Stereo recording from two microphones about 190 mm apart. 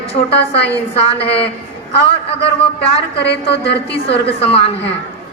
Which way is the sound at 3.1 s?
60° left (ahead or behind).